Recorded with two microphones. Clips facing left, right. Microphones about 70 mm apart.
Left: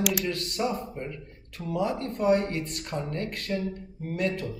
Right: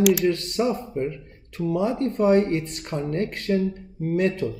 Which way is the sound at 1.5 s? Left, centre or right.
Right.